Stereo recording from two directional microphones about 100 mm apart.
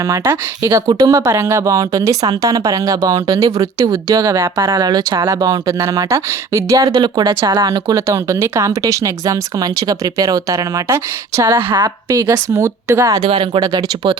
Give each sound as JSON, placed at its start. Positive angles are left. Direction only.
{"t": 0.1, "sound": "speech", "side_deg": -30}
{"t": 4.7, "sound": "speech", "side_deg": -40}
{"t": 6.9, "sound": "speech", "side_deg": -50}
{"t": 13.2, "sound": "speech", "side_deg": -60}
{"t": 13.6, "sound": "speech", "side_deg": -45}